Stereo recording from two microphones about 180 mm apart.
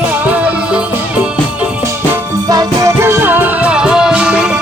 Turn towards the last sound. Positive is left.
turn(degrees=-5)  # may be behind; listen again after turning